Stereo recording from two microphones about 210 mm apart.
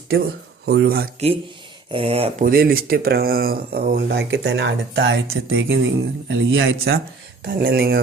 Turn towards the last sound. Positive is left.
turn(degrees=-45)  # may be behind; listen again after turning